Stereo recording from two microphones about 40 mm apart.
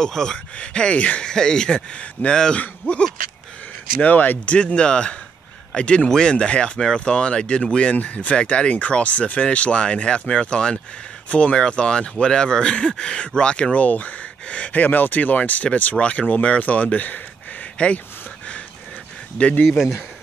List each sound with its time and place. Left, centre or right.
0.0 s speech: centre
0.6 s speech: left
1.2 s speech: centre
2.5 s speech: left
4.0 s speech: left
4.5 s speech: left
11.2 s speech: left
11.5 s speech: left
13.7 s speech: left
14.7 s speech: left
19.4 s speech: left